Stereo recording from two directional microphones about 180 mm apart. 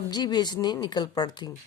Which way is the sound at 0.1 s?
25° left (ahead or behind).